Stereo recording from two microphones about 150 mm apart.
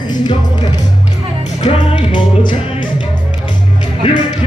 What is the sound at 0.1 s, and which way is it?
Music, 30° left (ahead or behind).